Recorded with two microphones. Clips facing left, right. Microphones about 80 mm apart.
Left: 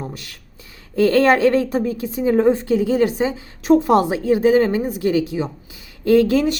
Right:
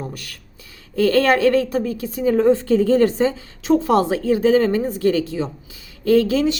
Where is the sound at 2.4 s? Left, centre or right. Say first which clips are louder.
Right 2 dB; centre.